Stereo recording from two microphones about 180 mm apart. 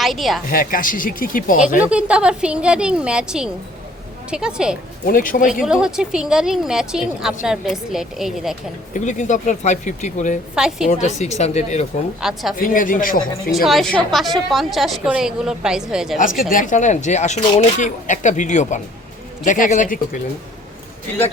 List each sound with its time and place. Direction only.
0.0 s a woman's voice: centre (ahead or behind)
0.5 s a man's voice: 50° left (ahead or behind)
1.8 s a woman's voice: 5° right (ahead or behind)
5.0 s a man's voice: 50° left (ahead or behind)
5.6 s a woman's voice: 5° right (ahead or behind)
8.9 s a man's voice: 45° left (ahead or behind)
10.5 s a woman's voice: 5° right (ahead or behind)
10.8 s speech: 40° left (ahead or behind)
12.2 s a woman's voice: centre (ahead or behind)
12.5 s a man's voice: 50° left (ahead or behind)
13.7 s a woman's voice: centre (ahead or behind)
16.5 s a man's voice: 45° left (ahead or behind)